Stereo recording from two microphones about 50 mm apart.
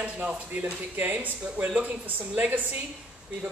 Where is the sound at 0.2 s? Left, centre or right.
Right.